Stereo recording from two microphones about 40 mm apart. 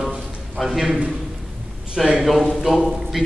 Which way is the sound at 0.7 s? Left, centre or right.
Centre.